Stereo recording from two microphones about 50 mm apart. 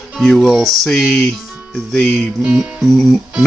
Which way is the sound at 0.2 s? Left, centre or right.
Centre.